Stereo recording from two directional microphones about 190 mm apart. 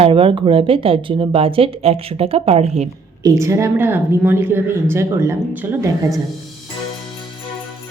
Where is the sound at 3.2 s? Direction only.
15° right (ahead or behind).